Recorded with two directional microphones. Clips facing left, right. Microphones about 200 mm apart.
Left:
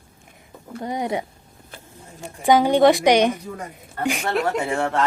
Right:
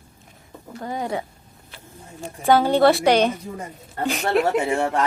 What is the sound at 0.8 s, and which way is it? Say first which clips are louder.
Speech: left 2 dB; 20° left (ahead or behind).